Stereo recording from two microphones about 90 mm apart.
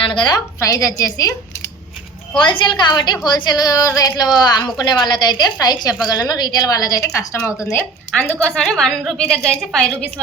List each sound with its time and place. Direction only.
0.0 s a woman's voice: 65° left (ahead or behind)
0.6 s a woman's voice: 40° left (ahead or behind)
2.3 s a woman's voice: 60° left (ahead or behind); by 7.5 s 30° left (ahead or behind)
7.8 s a woman's voice: 15° left (ahead or behind)